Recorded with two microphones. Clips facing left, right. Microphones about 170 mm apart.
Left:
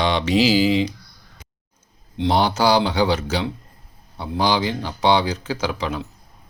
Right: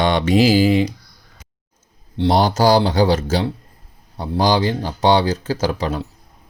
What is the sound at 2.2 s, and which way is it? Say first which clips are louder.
Speech: right 3 dB; 40° right (ahead or behind).